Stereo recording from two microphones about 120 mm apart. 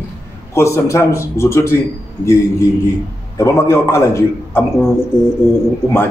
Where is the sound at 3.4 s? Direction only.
20° left (ahead or behind).